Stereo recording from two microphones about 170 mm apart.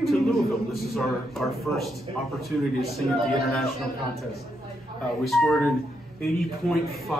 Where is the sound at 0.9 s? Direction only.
Centre (ahead or behind).